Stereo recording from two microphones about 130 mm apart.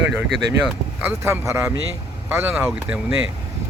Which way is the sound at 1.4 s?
20° right (ahead or behind).